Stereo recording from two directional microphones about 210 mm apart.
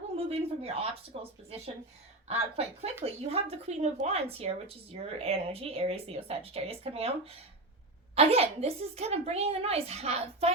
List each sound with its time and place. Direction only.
0.2 s speech: 30° right (ahead or behind)